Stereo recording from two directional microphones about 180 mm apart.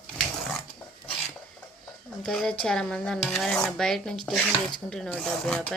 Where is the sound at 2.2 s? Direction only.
5° left (ahead or behind).